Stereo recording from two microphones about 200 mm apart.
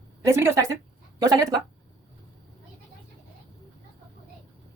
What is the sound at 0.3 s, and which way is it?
A woman's voice, 15° right (ahead or behind).